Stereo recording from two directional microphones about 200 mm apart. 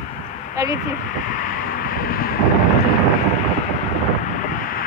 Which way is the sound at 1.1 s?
40° left (ahead or behind).